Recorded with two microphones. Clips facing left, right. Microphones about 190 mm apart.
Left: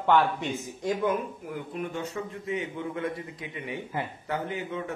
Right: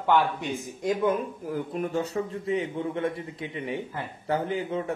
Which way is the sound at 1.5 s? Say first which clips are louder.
Right 6 dB; 40° right (ahead or behind).